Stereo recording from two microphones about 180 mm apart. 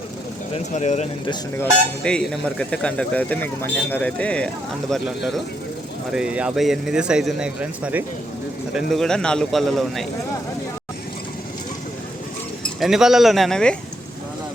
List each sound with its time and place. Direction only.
0.5 s speech: 40° left (ahead or behind)
2.0 s speech: 5° left (ahead or behind)
12.8 s speech: centre (ahead or behind)